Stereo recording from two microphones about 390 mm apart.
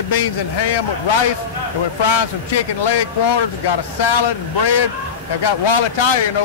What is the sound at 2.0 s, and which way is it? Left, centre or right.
A man's voice, left.